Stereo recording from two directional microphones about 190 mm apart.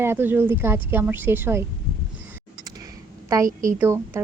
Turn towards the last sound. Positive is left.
turn(degrees=-10)  # may be behind; listen again after turning